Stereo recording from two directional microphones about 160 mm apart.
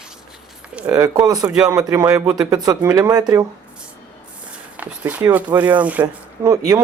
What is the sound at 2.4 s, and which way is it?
Speech, 25° right (ahead or behind).